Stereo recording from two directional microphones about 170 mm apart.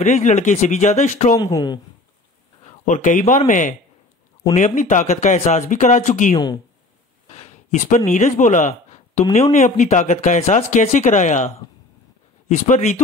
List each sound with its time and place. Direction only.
0.0 s speech: 45° left (ahead or behind)
1.5 s speech: 25° left (ahead or behind)
2.6 s speech: 45° left (ahead or behind)
6.3 s speech: 25° left (ahead or behind)
7.2 s speech: 45° left (ahead or behind)